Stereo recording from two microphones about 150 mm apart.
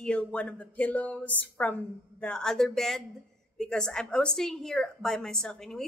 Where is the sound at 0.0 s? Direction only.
5° left (ahead or behind).